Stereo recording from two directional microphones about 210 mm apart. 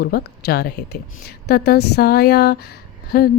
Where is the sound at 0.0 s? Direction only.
50° left (ahead or behind).